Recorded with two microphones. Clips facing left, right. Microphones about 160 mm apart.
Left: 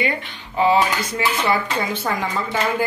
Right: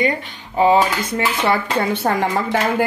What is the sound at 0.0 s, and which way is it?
Speech, 40° right (ahead or behind).